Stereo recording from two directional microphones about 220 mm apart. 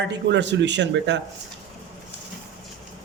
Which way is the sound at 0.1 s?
55° right (ahead or behind).